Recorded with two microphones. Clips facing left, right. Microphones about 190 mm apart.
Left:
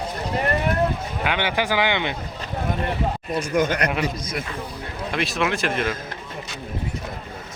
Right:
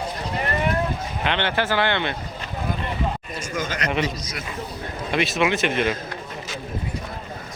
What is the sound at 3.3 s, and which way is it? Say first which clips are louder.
Speech: left 7 dB; 60° left (ahead or behind).